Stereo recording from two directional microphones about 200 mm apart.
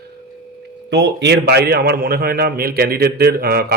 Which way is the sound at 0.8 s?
60° right (ahead or behind).